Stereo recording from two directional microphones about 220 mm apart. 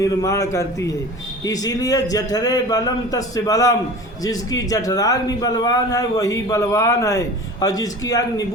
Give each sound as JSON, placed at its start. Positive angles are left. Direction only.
{"t": 0.0, "sound": "a man's voice", "side_deg": 15}